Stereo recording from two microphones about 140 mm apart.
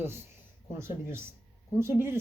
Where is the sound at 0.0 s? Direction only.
15° right (ahead or behind).